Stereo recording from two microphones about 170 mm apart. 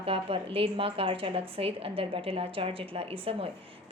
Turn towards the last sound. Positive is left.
turn(degrees=-35)  # may be behind; listen again after turning